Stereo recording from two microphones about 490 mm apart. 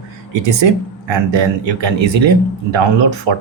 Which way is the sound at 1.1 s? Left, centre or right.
Right.